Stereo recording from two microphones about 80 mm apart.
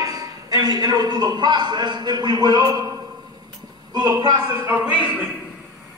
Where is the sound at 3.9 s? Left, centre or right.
Right.